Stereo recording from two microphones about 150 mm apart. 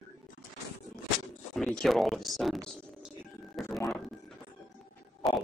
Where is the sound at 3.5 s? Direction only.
Centre (ahead or behind).